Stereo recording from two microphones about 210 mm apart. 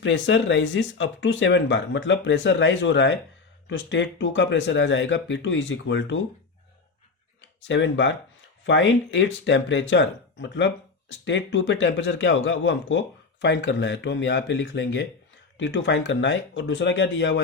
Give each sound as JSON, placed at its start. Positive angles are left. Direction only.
{"t": 0.0, "sound": "a man's voice", "side_deg": 60}
{"t": 7.7, "sound": "a man's voice", "side_deg": 60}